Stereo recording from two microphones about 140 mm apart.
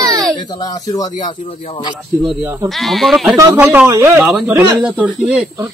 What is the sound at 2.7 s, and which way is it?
Speech, centre (ahead or behind).